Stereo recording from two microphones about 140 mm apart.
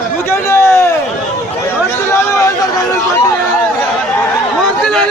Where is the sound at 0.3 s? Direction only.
20° left (ahead or behind).